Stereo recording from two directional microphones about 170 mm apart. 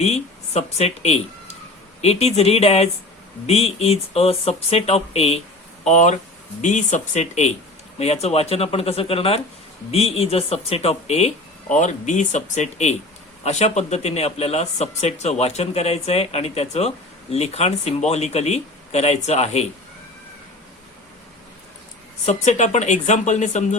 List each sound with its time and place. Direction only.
0.0 s speech: 40° left (ahead or behind)
22.3 s speech: 45° left (ahead or behind)